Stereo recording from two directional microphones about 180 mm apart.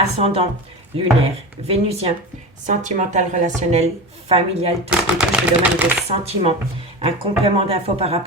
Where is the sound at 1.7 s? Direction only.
35° right (ahead or behind).